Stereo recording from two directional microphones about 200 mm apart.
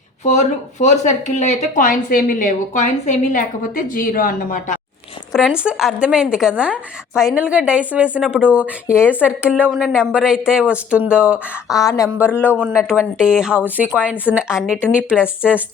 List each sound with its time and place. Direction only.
0.3 s speech: 35° left (ahead or behind)
5.3 s speech: 5° right (ahead or behind)
11.7 s a woman's voice: 15° left (ahead or behind)
12.0 s speech: 10° right (ahead or behind)
12.4 s a woman's voice: 10° left (ahead or behind)
12.6 s speech: 5° right (ahead or behind)